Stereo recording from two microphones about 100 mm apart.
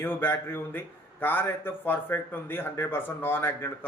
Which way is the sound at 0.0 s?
20° left (ahead or behind).